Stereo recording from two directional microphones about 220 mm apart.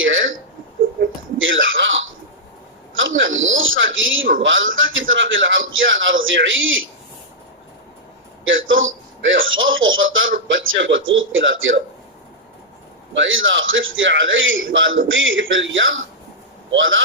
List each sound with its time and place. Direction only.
0.0 s a sound: 60° right (ahead or behind)
1.4 s throat clearing: 60° right (ahead or behind)
2.9 s a sound: 60° right (ahead or behind)
4.4 s a man's voice: 60° right (ahead or behind)
8.4 s a man's voice: 60° right (ahead or behind)
13.1 s a man's voice: 60° right (ahead or behind)